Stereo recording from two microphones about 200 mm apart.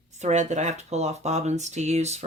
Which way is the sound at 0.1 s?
35° right (ahead or behind).